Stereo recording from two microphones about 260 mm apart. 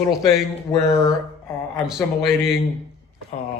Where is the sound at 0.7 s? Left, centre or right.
Centre.